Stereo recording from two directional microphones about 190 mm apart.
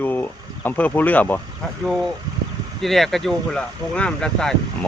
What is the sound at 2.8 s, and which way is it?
Speech, centre (ahead or behind).